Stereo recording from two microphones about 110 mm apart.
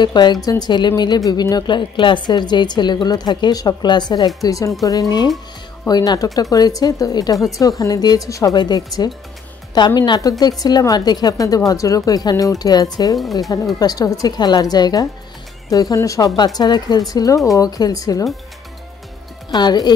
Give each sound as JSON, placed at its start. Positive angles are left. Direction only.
{"t": 0.0, "sound": "a woman's voice", "side_deg": 40}
{"t": 4.4, "sound": "a woman's voice", "side_deg": 30}
{"t": 5.9, "sound": "a woman's voice", "side_deg": 35}
{"t": 19.5, "sound": "a woman's voice", "side_deg": 40}